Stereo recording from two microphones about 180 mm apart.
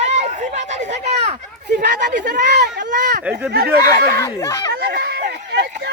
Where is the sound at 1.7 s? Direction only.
70° right (ahead or behind).